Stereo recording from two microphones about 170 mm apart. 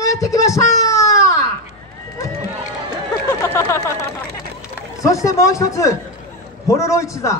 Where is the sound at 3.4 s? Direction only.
15° left (ahead or behind).